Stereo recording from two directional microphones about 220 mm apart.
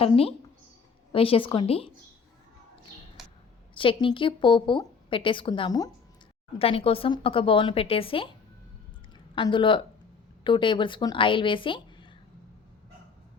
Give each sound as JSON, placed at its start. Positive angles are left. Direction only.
{"t": 0.0, "sound": "a woman's voice", "side_deg": 25}
{"t": 3.8, "sound": "a woman's voice", "side_deg": 25}
{"t": 9.3, "sound": "a woman's voice", "side_deg": 20}